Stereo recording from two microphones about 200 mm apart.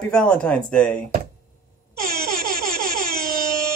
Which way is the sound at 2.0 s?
50° right (ahead or behind).